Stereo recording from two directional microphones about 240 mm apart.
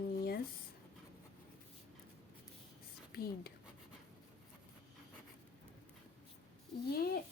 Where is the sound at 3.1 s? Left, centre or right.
Left.